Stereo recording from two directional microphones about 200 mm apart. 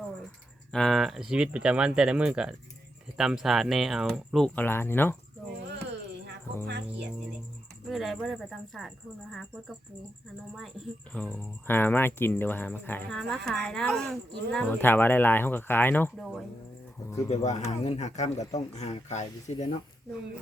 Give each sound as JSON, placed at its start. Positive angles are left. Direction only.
{"t": 0.7, "sound": "speech", "side_deg": 0}
{"t": 7.9, "sound": "speech", "side_deg": 0}
{"t": 11.1, "sound": "speech", "side_deg": 5}
{"t": 17.2, "sound": "speech", "side_deg": 35}